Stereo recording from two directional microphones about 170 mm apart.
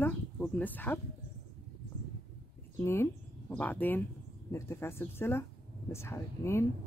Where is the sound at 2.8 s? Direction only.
15° left (ahead or behind).